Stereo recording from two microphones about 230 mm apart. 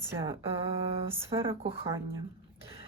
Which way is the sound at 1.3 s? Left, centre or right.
Right.